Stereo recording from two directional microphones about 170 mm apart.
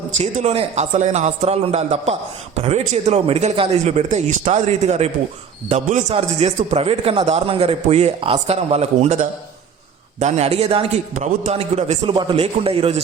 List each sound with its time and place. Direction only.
0.2 s a man's voice: 40° right (ahead or behind)